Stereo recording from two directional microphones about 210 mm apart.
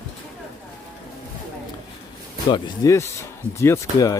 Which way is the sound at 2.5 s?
15° left (ahead or behind).